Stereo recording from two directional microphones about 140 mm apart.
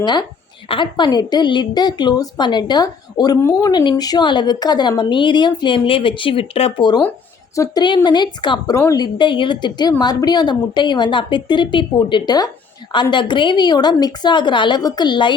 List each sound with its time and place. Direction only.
0.0 s a woman's voice: 30° left (ahead or behind)